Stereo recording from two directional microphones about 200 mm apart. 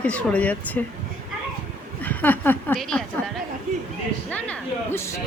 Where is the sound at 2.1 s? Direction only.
10° left (ahead or behind).